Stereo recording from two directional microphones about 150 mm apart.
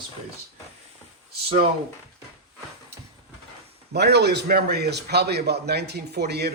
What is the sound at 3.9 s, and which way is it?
A man's voice, 90° right.